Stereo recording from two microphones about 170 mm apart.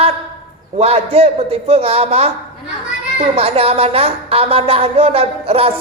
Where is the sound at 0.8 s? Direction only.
40° right (ahead or behind).